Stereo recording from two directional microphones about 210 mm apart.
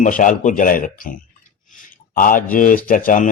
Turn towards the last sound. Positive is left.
turn(degrees=40)  # may be behind; listen again after turning